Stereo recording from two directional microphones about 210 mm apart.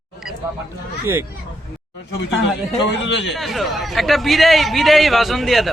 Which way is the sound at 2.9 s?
55° left (ahead or behind).